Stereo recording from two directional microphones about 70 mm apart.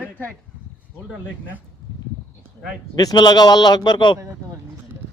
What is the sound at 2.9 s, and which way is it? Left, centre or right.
A man's voice, left.